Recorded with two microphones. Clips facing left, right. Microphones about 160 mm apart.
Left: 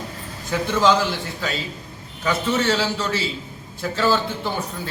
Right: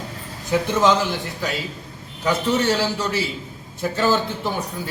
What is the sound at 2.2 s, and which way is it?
A man's voice, 15° right (ahead or behind).